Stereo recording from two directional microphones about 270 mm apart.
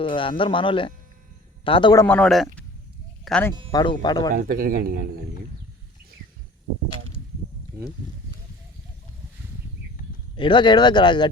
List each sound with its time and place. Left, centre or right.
0.0 s speech: centre
3.7 s speech: centre
4.4 s speech: right
10.3 s speech: centre